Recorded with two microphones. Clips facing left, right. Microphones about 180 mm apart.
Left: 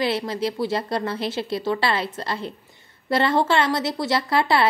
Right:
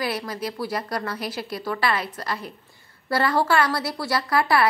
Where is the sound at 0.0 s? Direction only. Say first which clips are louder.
Left 4 dB; 25° left (ahead or behind).